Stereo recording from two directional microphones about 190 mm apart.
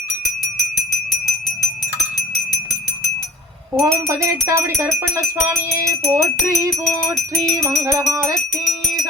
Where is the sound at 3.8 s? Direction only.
15° right (ahead or behind).